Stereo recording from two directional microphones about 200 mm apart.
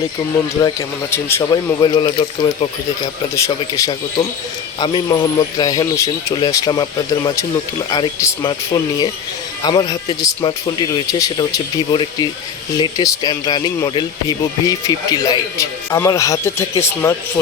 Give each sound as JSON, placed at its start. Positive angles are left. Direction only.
{"t": 1.1, "sound": "speech", "side_deg": 20}